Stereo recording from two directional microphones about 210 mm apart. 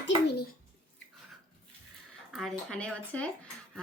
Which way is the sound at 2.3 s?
Centre (ahead or behind).